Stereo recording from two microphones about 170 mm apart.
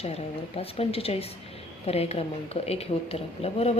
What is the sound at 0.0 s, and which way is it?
A woman's voice, 35° left (ahead or behind).